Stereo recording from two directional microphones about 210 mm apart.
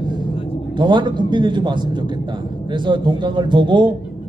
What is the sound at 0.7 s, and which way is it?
A man's voice, 20° right (ahead or behind).